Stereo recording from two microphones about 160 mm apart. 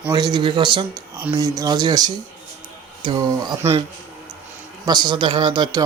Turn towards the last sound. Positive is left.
turn(degrees=-25)  # may be behind; listen again after turning